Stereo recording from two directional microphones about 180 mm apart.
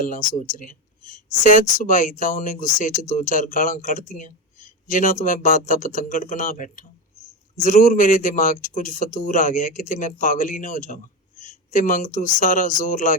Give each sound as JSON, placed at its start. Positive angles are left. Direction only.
{"t": 0.5, "sound": "a man's voice", "side_deg": 45}